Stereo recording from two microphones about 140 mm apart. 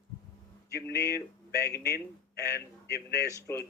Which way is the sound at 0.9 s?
20° left (ahead or behind).